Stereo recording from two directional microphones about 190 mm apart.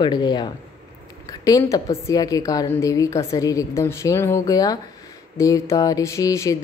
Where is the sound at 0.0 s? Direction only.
20° left (ahead or behind).